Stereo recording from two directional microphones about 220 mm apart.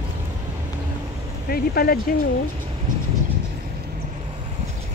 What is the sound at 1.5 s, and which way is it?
Speech, 45° left (ahead or behind).